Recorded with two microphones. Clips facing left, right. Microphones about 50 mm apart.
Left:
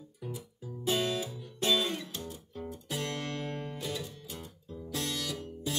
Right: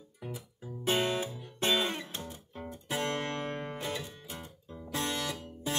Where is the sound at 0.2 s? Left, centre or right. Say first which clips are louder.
Left 1 dB; right.